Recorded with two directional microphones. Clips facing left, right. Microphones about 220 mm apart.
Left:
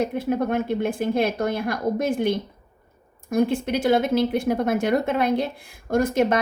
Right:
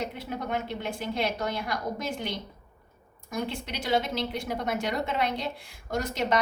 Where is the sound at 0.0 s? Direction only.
50° left (ahead or behind).